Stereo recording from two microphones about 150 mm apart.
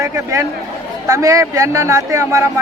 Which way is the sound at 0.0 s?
20° right (ahead or behind).